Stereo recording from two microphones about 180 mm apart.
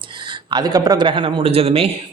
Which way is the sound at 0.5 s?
20° right (ahead or behind).